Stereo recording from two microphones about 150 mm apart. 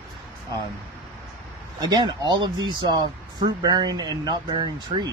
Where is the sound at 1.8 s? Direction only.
25° right (ahead or behind).